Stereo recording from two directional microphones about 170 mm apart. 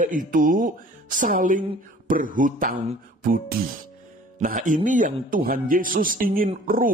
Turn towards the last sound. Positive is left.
turn(degrees=-55)  # may be behind; listen again after turning